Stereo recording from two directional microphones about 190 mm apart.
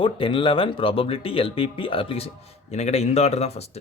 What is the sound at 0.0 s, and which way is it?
Speech, 25° left (ahead or behind).